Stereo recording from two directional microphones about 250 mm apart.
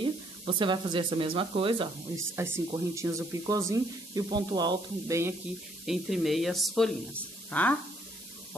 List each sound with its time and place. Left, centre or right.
0.0 s speech: centre
5.9 s speech: centre